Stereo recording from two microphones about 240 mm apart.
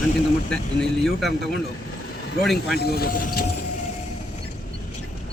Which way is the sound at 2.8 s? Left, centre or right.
Left.